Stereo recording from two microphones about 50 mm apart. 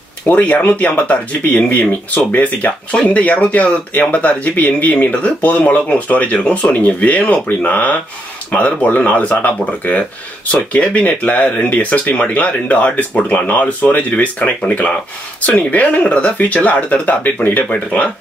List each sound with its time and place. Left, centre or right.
0.3 s speech: left